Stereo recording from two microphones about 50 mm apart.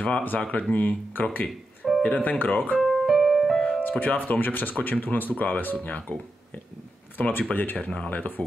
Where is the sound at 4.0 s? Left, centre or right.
Left.